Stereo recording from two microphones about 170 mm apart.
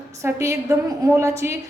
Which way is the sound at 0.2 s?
15° right (ahead or behind).